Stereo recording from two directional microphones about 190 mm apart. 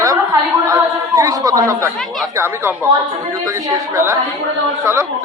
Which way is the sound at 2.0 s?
Centre (ahead or behind).